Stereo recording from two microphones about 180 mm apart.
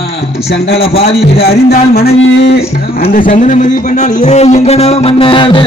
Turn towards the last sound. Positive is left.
turn(degrees=30)  # may be behind; listen again after turning